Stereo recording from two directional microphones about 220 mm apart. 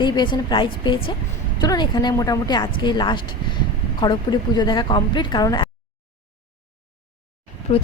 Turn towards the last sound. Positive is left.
turn(degrees=25)  # may be behind; listen again after turning